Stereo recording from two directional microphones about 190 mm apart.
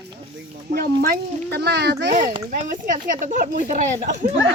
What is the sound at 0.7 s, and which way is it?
Speech, 55° right (ahead or behind).